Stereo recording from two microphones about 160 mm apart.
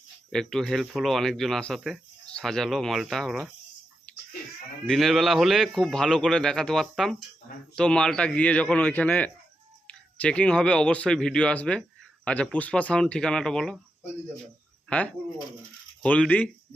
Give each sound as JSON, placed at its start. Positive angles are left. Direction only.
{"t": 0.3, "sound": "speech", "side_deg": 5}
{"t": 4.9, "sound": "a man's voice", "side_deg": 0}
{"t": 14.8, "sound": "a man's voice", "side_deg": 10}